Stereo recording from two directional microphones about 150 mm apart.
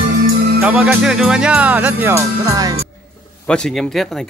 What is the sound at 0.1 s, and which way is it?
Music, 70° right (ahead or behind).